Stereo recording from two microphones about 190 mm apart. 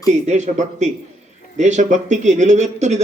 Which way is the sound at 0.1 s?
40° right (ahead or behind).